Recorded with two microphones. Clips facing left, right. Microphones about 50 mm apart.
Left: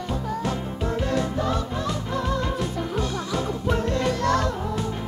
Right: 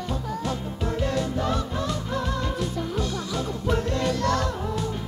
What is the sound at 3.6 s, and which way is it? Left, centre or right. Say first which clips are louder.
Music: even; left.